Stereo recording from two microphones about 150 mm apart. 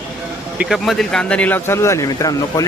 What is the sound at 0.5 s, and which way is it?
Speech, 5° right (ahead or behind).